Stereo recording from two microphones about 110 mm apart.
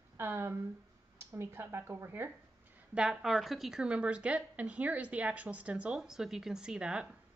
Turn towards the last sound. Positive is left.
turn(degrees=-10)  # may be behind; listen again after turning